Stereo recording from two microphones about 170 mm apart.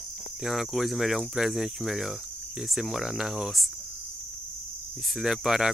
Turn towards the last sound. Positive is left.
turn(degrees=0)  # may be behind; listen again after turning